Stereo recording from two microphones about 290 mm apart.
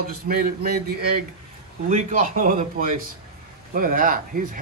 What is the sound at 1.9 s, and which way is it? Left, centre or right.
A man's voice, right.